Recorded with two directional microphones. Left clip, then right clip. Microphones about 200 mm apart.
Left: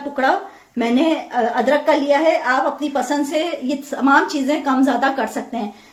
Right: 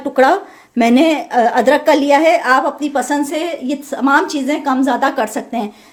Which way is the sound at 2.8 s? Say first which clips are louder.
Right 3 dB; 25° right (ahead or behind).